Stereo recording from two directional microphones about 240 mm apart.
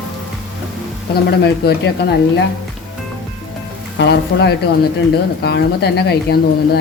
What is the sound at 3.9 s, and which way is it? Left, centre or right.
Speech, left.